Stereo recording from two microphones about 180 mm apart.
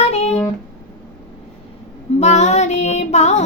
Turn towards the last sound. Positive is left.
turn(degrees=40)  # may be behind; listen again after turning